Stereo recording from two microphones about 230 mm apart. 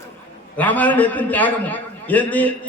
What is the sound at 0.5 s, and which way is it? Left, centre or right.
A man's voice, centre.